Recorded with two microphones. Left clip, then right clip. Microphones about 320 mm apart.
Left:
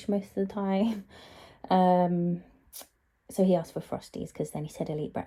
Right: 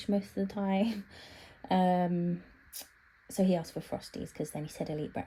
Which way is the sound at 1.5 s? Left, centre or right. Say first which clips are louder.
Left 6 dB; left.